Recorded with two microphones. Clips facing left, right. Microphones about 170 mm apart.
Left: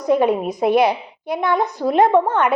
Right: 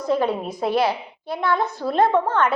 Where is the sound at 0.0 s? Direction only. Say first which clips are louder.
Left 5 dB; 15° left (ahead or behind).